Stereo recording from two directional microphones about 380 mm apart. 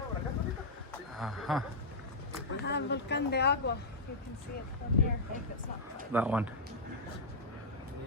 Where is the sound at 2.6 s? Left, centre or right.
Left.